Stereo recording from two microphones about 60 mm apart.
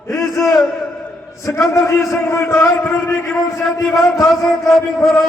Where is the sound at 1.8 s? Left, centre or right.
Left.